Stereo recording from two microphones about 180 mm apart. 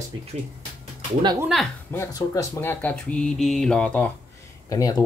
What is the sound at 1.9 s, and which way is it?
A woman's voice, 20° left (ahead or behind).